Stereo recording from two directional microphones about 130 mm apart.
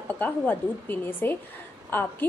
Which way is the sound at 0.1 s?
15° left (ahead or behind).